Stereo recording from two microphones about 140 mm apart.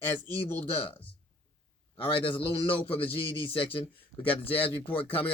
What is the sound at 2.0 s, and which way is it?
Speech, 40° left (ahead or behind).